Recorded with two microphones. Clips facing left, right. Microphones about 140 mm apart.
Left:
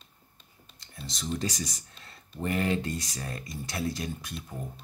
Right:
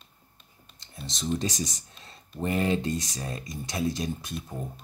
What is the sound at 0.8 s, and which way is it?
Speech, 25° right (ahead or behind).